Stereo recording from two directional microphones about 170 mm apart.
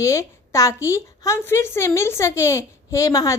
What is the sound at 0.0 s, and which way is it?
A woman's voice, 15° left (ahead or behind).